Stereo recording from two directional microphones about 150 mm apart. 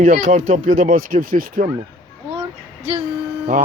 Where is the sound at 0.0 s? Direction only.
65° right (ahead or behind).